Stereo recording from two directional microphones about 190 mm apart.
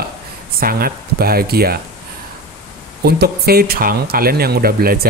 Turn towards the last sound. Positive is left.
turn(degrees=-50)  # may be behind; listen again after turning